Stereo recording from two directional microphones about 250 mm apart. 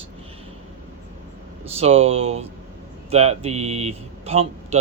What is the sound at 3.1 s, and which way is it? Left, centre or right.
Speech, right.